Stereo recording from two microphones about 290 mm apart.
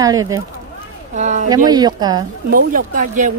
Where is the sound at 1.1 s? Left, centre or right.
Right.